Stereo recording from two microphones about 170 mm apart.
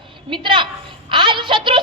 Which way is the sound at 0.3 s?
30° right (ahead or behind).